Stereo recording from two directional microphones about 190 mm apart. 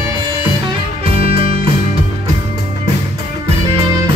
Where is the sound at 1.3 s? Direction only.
30° right (ahead or behind).